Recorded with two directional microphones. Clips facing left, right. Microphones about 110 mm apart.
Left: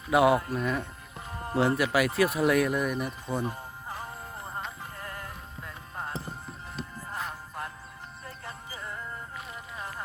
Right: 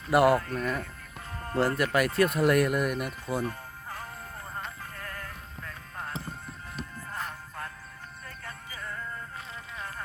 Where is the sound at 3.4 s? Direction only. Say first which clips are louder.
Even; 15° left (ahead or behind).